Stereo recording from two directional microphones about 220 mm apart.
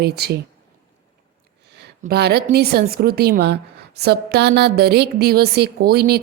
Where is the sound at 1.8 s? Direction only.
45° right (ahead or behind).